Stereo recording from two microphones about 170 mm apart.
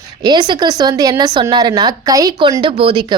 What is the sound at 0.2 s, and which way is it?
Speech, 25° right (ahead or behind).